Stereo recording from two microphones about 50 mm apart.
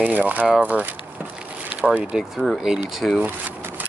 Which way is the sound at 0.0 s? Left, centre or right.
Right.